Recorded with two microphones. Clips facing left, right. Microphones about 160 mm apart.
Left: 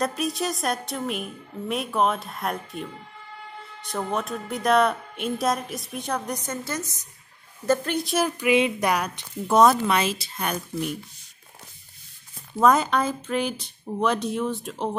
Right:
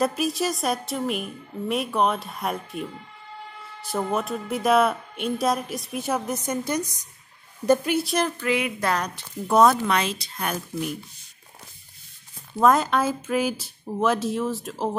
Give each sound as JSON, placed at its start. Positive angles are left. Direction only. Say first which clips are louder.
{"t": 0.0, "sound": "a woman's voice", "louder": "right 2 dB", "side_deg": 0}
{"t": 8.4, "sound": "a woman's voice", "louder": "left 4 dB", "side_deg": 20}
{"t": 9.1, "sound": "speech", "louder": "even", "side_deg": 0}
{"t": 12.6, "sound": "speech", "louder": "even", "side_deg": 0}